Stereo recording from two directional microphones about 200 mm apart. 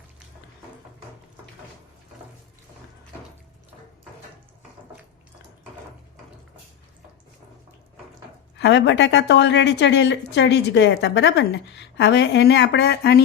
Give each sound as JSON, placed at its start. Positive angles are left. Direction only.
{"t": 8.5, "sound": "a woman's voice", "side_deg": 60}